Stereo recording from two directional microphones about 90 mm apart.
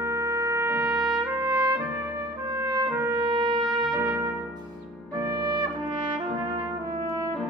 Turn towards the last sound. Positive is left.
turn(degrees=-50)  # may be behind; listen again after turning